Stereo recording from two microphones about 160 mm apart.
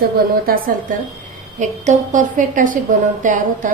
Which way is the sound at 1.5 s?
50° right (ahead or behind).